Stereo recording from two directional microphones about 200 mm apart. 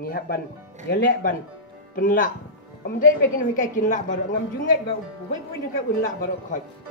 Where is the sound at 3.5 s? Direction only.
40° left (ahead or behind).